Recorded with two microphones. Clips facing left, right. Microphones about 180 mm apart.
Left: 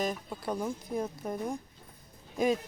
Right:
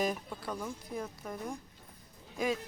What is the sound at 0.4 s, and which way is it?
Speech, 30° left (ahead or behind).